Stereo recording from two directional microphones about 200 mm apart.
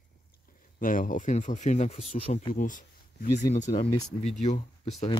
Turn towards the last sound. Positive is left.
turn(degrees=35)  # may be behind; listen again after turning